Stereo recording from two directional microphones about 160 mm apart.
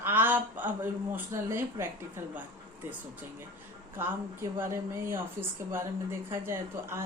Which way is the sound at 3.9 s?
15° right (ahead or behind).